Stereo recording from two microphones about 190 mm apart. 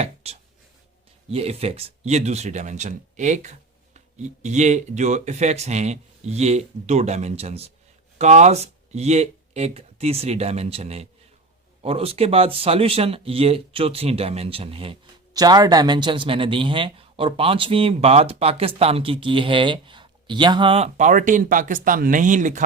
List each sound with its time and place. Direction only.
0.0 s speech: 35° right (ahead or behind)